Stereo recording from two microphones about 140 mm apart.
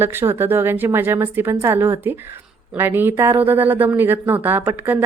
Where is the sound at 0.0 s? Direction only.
15° right (ahead or behind).